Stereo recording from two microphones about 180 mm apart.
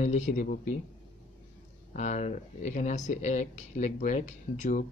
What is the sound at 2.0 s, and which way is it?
Speech, 40° left (ahead or behind).